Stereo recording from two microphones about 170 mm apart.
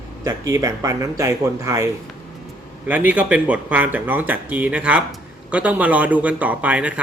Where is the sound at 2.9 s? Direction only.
10° right (ahead or behind).